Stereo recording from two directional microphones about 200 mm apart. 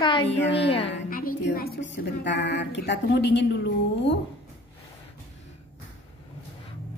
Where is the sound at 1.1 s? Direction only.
45° left (ahead or behind).